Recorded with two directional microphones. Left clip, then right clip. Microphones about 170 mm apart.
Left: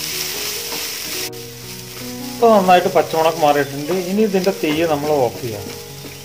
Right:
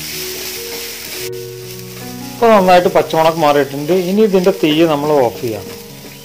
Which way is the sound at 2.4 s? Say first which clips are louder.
Right 3 dB; 50° right (ahead or behind).